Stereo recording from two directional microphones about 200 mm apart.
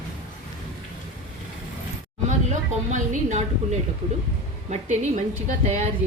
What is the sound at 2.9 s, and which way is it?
Speech, 35° right (ahead or behind).